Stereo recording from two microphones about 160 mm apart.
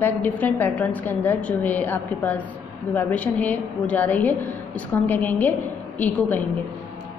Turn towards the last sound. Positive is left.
turn(degrees=10)  # may be behind; listen again after turning